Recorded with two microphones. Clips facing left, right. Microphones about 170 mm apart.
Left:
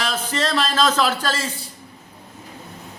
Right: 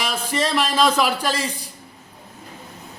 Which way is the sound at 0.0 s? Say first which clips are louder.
Even; 10° right (ahead or behind).